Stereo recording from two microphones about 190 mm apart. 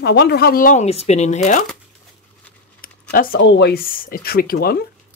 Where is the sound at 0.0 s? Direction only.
60° left (ahead or behind); by 1.6 s 35° left (ahead or behind).